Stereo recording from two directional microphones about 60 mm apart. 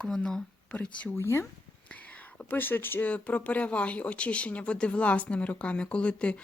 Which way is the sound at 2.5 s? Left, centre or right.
Left.